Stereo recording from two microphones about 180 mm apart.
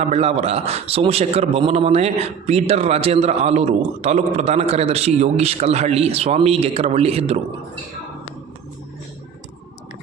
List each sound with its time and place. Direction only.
0.0 s a man's voice: 35° right (ahead or behind)